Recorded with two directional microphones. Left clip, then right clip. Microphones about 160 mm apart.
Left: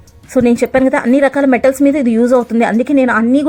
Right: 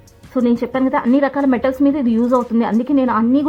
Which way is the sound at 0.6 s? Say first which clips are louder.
Left 6 dB; 25° left (ahead or behind).